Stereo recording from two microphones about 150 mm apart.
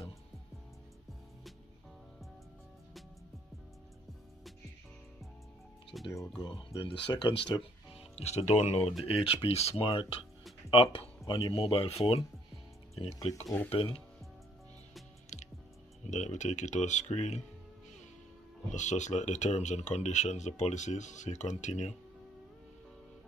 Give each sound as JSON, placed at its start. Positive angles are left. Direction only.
{"t": 5.9, "sound": "speech", "side_deg": 0}
{"t": 6.8, "sound": "speech", "side_deg": 35}
{"t": 8.2, "sound": "speech", "side_deg": 45}
{"t": 13.4, "sound": "speech", "side_deg": 15}
{"t": 13.7, "sound": "speech", "side_deg": 40}
{"t": 15.3, "sound": "music", "side_deg": 55}
{"t": 16.1, "sound": "speech", "side_deg": 50}
{"t": 18.7, "sound": "speech", "side_deg": 50}